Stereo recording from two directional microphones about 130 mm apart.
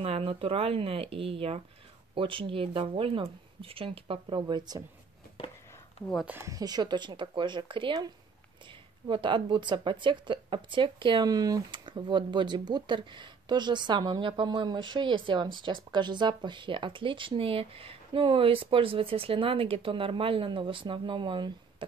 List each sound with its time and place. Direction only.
0.0 s speech: 45° right (ahead or behind)
6.2 s speech: 20° right (ahead or behind); by 21.8 s 40° right (ahead or behind)